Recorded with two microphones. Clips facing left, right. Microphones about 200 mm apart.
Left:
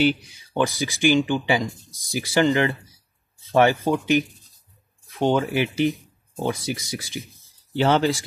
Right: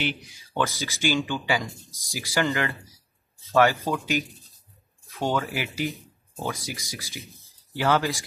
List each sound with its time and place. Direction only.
0.5 s speech: 15° left (ahead or behind)
5.1 s speech: 15° left (ahead or behind)